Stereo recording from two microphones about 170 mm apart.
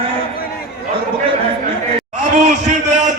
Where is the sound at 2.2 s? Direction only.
45° right (ahead or behind).